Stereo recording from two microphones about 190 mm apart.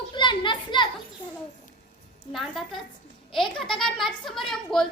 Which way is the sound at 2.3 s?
Centre (ahead or behind).